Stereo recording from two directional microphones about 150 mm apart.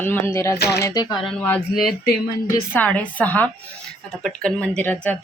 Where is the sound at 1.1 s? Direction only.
Centre (ahead or behind).